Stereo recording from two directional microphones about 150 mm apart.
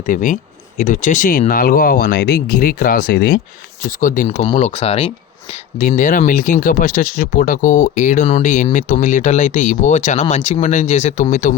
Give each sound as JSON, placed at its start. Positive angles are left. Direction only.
{"t": 0.0, "sound": "speech", "side_deg": 60}
{"t": 3.8, "sound": "speech", "side_deg": 60}
{"t": 4.3, "sound": "speech", "side_deg": 45}
{"t": 6.0, "sound": "speech", "side_deg": 60}